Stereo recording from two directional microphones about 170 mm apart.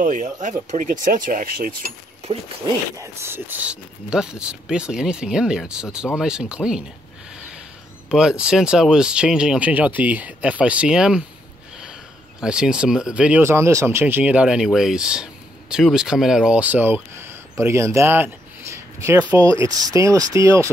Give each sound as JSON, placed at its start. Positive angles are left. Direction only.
{"t": 0.0, "sound": "speech", "side_deg": -50}
{"t": 3.0, "sound": "speech", "side_deg": -15}
{"t": 7.3, "sound": "a sound", "side_deg": -5}
{"t": 8.1, "sound": "speech", "side_deg": -5}